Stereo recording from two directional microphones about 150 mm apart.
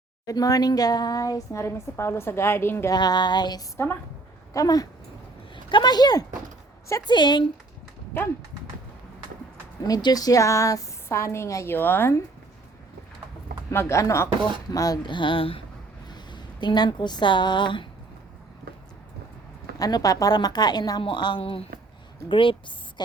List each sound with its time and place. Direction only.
0.3 s a woman's voice: 25° left (ahead or behind)
3.8 s a woman's voice: 15° left (ahead or behind)
9.8 s a woman's voice: 25° left (ahead or behind)
13.7 s a woman's voice: 20° left (ahead or behind)
19.8 s a woman's voice: 25° left (ahead or behind)